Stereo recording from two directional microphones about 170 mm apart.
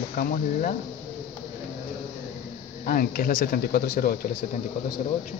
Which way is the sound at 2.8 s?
55° left (ahead or behind).